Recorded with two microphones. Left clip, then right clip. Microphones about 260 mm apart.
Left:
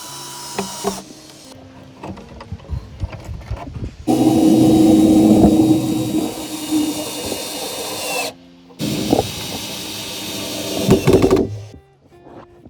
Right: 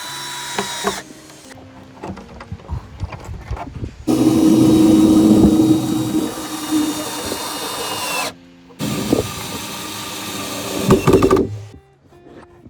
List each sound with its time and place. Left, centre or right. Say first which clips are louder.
0.1 s ratchet: right 5 dB; right
4.0 s a sound: even; centre
10.9 s sewing machine: right 1 dB; centre